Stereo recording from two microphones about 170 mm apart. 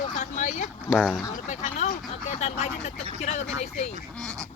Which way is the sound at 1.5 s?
40° left (ahead or behind).